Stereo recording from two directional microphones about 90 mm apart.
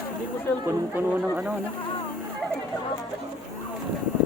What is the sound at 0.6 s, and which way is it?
Speech, 20° right (ahead or behind).